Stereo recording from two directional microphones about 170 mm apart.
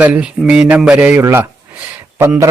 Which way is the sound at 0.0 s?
5° right (ahead or behind).